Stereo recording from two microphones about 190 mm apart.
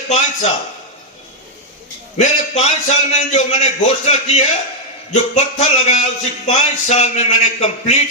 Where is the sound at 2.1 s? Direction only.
35° left (ahead or behind).